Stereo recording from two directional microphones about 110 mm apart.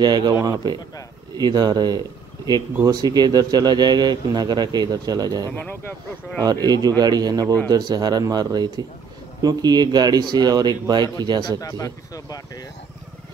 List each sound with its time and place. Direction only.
0.0 s speech: 40° right (ahead or behind)
5.5 s speech: 15° left (ahead or behind)
6.4 s speech: 35° right (ahead or behind)
11.6 s speech: 30° left (ahead or behind)